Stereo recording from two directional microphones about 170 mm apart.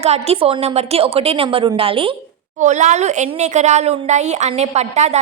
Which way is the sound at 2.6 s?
45° right (ahead or behind).